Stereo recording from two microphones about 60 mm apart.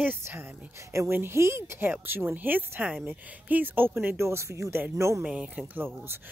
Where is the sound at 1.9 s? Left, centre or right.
Right.